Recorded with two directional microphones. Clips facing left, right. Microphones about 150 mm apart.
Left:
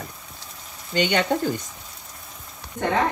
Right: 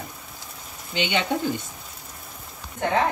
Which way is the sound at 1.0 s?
45° left (ahead or behind).